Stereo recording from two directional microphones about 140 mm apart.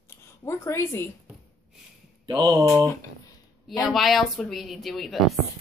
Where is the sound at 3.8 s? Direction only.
Centre (ahead or behind).